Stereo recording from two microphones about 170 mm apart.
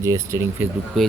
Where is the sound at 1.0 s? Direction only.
Centre (ahead or behind).